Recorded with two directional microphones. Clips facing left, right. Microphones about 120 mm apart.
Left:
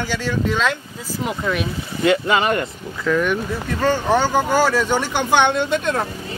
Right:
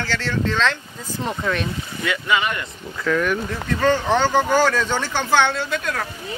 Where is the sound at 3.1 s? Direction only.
5° left (ahead or behind); by 6.0 s 25° left (ahead or behind).